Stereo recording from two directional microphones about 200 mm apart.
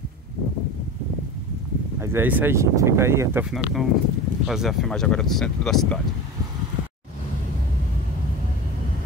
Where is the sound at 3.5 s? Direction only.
Centre (ahead or behind).